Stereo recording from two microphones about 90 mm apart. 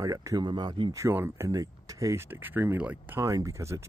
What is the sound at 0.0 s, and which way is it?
Speech, 40° right (ahead or behind).